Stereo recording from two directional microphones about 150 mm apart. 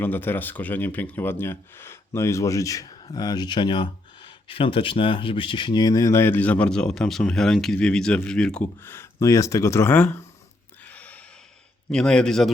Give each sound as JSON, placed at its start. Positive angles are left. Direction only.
{"t": 0.0, "sound": "speech", "side_deg": 15}
{"t": 10.8, "sound": "gasp", "side_deg": 10}
{"t": 11.9, "sound": "a man's voice", "side_deg": 5}